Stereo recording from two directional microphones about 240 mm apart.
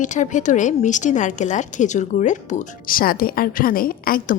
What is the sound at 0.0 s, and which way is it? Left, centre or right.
A woman's voice, left.